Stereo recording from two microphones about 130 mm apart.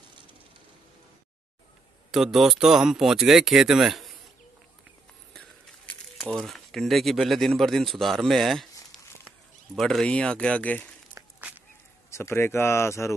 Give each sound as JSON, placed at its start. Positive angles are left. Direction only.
{"t": 2.0, "sound": "speech", "side_deg": 0}
{"t": 6.2, "sound": "speech", "side_deg": 0}
{"t": 9.8, "sound": "speech", "side_deg": 5}
{"t": 12.1, "sound": "speech", "side_deg": 20}